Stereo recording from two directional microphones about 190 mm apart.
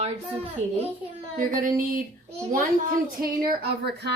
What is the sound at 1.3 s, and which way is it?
Child singing, 45° right (ahead or behind).